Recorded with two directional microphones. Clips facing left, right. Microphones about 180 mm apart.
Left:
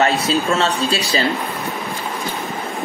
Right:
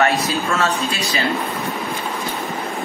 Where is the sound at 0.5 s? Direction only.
30° left (ahead or behind).